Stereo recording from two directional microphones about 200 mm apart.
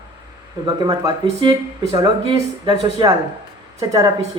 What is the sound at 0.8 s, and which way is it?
A man's voice, 20° right (ahead or behind).